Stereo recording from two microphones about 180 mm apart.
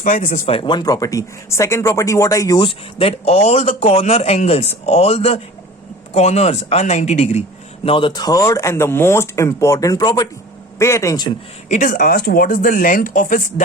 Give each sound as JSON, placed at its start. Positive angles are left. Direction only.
{"t": 0.0, "sound": "speech", "side_deg": 45}
{"t": 11.7, "sound": "speech", "side_deg": 45}